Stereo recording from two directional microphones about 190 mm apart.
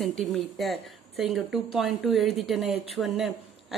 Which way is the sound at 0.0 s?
Centre (ahead or behind).